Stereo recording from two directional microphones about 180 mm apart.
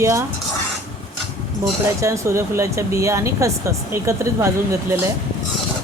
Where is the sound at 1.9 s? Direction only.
15° right (ahead or behind).